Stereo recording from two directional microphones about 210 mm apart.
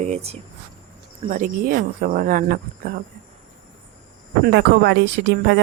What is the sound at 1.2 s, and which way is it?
Speech, 40° right (ahead or behind).